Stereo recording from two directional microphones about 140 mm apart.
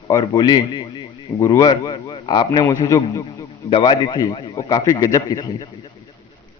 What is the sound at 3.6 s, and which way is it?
A man's voice, 40° left (ahead or behind).